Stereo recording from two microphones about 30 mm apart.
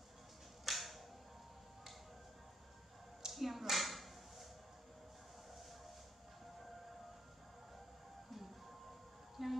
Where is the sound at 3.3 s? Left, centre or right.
Centre.